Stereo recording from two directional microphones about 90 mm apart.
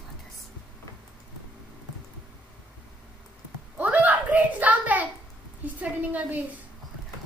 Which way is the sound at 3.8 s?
20° right (ahead or behind).